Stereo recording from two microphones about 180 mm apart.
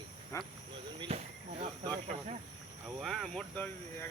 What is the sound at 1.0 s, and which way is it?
Train, 35° right (ahead or behind).